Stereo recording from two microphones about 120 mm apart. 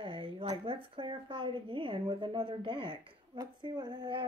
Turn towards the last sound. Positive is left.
turn(degrees=-35)  # may be behind; listen again after turning